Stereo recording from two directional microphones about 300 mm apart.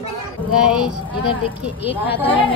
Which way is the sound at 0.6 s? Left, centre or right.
Centre.